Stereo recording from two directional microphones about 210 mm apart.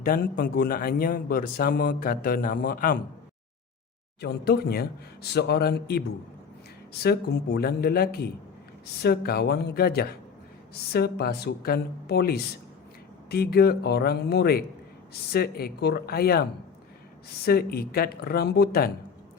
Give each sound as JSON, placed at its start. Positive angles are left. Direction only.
{"t": 0.0, "sound": "speech", "side_deg": 45}
{"t": 4.2, "sound": "speech", "side_deg": 50}
{"t": 7.0, "sound": "speech", "side_deg": 50}